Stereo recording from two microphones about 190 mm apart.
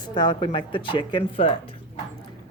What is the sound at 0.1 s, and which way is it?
Speech, 25° left (ahead or behind).